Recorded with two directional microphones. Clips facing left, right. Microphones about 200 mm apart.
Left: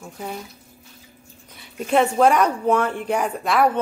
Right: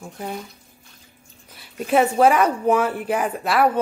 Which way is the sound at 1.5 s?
5° right (ahead or behind).